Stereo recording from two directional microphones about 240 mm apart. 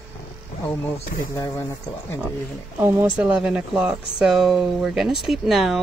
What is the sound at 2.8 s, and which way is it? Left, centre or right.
Speech, centre.